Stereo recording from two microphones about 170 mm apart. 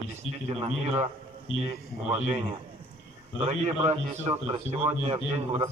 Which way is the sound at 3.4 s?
40° right (ahead or behind).